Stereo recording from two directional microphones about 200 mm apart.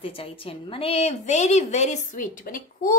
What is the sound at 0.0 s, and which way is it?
A woman's voice, 25° left (ahead or behind).